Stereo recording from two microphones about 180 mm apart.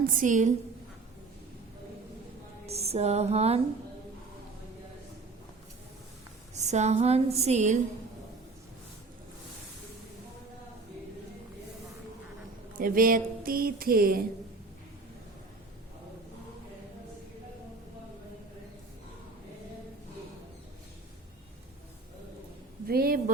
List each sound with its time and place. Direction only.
0.0 s speech: 45° right (ahead or behind)
2.6 s a woman's voice: 35° right (ahead or behind)
6.5 s a woman's voice: 40° right (ahead or behind)
12.8 s speech: 50° right (ahead or behind)
22.9 s speech: 55° right (ahead or behind)